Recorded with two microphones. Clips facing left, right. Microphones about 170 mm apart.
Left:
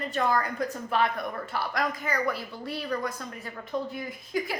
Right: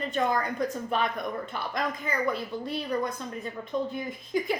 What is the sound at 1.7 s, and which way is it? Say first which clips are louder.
A woman's voice: even; 25° right (ahead or behind).